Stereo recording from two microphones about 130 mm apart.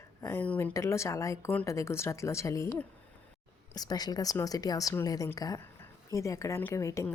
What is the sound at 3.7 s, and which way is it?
Speech, 30° left (ahead or behind).